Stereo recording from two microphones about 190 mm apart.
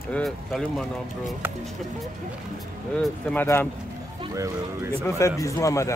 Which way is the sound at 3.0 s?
5° left (ahead or behind).